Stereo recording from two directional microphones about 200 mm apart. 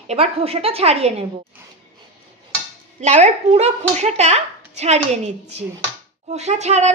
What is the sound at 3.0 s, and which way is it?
A woman's voice, 35° right (ahead or behind).